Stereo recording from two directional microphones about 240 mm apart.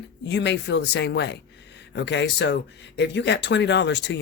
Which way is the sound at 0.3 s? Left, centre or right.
Left.